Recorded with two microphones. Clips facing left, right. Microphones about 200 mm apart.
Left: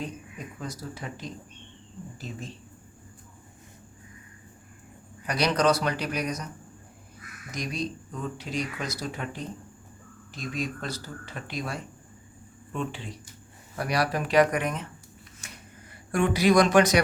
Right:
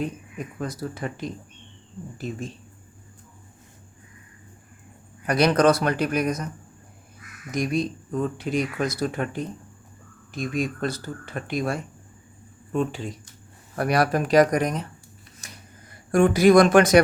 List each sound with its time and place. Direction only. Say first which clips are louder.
0.6 s speech: right 7 dB; 55° right (ahead or behind)
5.2 s speech: right 6 dB; 50° right (ahead or behind)
7.5 s speech: right 8 dB; 50° right (ahead or behind)
12.7 s speech: right 7 dB; 40° right (ahead or behind)
13.7 s speech: right 5 dB; 55° right (ahead or behind)
15.4 s a sound: right 1 dB; 35° right (ahead or behind)
16.1 s speech: right 6 dB; 45° right (ahead or behind)